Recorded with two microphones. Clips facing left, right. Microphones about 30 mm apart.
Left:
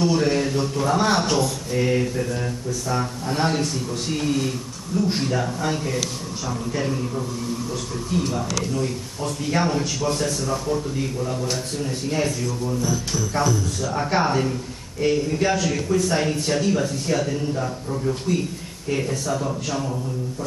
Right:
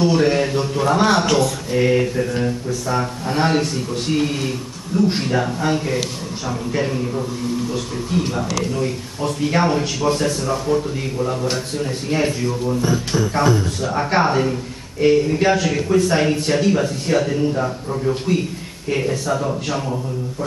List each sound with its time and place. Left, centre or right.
0.0 s a man's voice: right
13.9 s a man's voice: right